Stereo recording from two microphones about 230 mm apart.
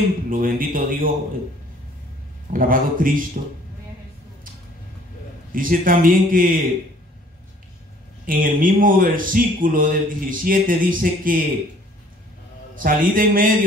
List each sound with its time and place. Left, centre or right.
0.3 s speech: right
2.5 s speech: right
5.5 s speech: right
8.3 s speech: right
12.7 s speech: right